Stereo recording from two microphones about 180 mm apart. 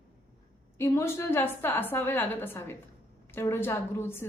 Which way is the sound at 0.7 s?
15° left (ahead or behind).